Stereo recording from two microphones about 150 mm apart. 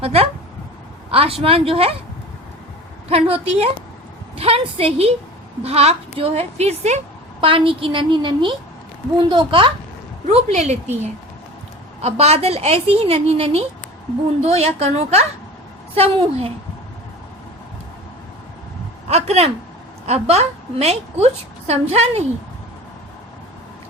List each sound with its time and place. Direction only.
0.0 s a woman's voice: 40° right (ahead or behind)
3.1 s a woman's voice: 40° right (ahead or behind)
7.4 s a woman's voice: 35° right (ahead or behind)
10.2 s a woman's voice: 50° right (ahead or behind)
12.0 s a woman's voice: 45° right (ahead or behind)
19.0 s a man's voice: 45° right (ahead or behind)